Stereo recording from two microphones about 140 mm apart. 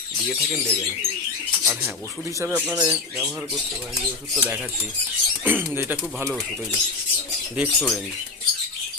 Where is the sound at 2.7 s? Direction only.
25° right (ahead or behind).